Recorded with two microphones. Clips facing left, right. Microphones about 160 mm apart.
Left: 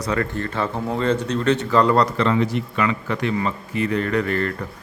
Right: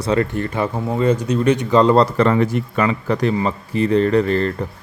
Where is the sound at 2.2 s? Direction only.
50° right (ahead or behind).